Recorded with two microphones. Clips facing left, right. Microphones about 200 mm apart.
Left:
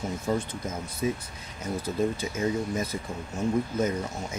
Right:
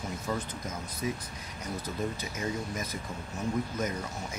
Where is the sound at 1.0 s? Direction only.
25° left (ahead or behind).